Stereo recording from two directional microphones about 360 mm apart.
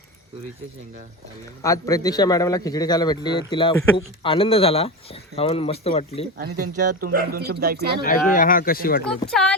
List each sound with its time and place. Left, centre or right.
1.6 s speech: centre
7.0 s speech: right
8.0 s speech: left
9.3 s speech: centre